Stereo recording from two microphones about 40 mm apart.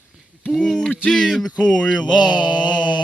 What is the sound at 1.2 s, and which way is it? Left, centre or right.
Speech, centre.